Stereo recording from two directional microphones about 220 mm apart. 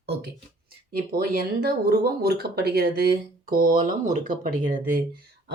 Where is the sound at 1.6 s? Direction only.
45° right (ahead or behind).